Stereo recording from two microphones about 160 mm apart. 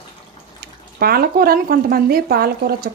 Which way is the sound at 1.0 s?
70° right (ahead or behind).